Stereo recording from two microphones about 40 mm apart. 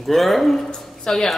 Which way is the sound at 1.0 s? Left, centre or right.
Centre.